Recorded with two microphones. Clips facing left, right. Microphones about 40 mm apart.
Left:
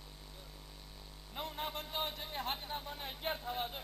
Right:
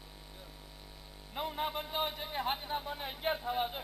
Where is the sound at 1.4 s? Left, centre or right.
Centre.